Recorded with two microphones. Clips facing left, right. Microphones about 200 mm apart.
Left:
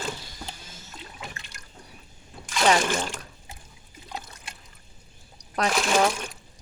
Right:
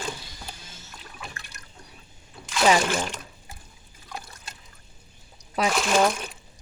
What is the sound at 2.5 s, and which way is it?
Speech, 5° right (ahead or behind).